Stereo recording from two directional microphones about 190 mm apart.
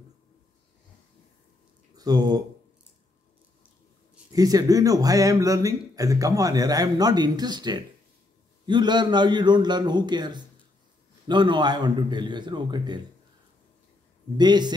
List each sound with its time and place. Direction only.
2.0 s speech: 20° right (ahead or behind)
4.3 s speech: 20° right (ahead or behind)
14.3 s speech: 20° right (ahead or behind)